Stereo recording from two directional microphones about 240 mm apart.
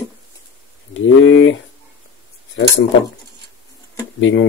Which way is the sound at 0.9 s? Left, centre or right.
Left.